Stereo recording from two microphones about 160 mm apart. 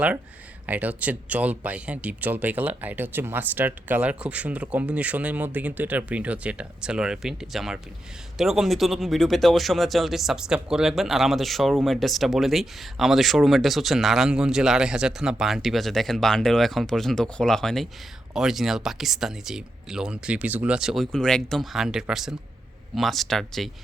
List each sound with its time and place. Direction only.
0.7 s speech: 10° right (ahead or behind)